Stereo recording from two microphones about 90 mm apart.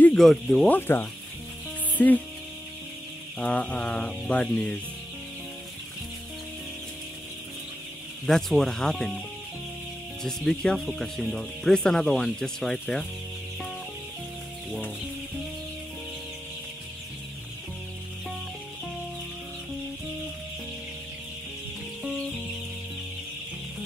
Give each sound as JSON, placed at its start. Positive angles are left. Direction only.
{"t": 0.2, "sound": "speech", "side_deg": 0}
{"t": 0.7, "sound": "speech", "side_deg": 20}
{"t": 3.3, "sound": "speech", "side_deg": 15}
{"t": 8.3, "sound": "speech", "side_deg": 5}
{"t": 10.2, "sound": "speech", "side_deg": 5}